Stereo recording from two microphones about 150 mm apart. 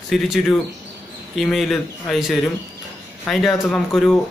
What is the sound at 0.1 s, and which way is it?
Speech, centre (ahead or behind).